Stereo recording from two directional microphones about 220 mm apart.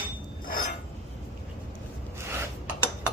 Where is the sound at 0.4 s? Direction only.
40° left (ahead or behind).